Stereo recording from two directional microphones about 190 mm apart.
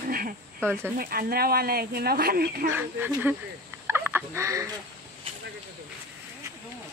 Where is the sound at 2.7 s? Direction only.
10° right (ahead or behind).